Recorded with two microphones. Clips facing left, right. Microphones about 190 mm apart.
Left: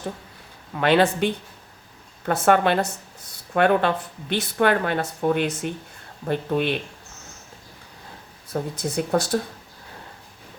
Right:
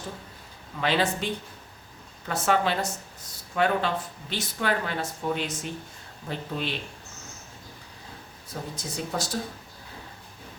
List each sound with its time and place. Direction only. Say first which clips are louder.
0.8 s speech: left 7 dB; 60° left (ahead or behind)
8.7 s speech: left 9 dB; 60° left (ahead or behind)